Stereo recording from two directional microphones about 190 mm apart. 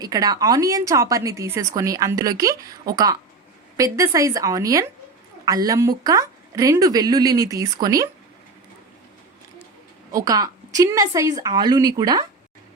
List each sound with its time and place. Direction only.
0.0 s speech: 20° right (ahead or behind)
10.2 s a woman's voice: 20° right (ahead or behind)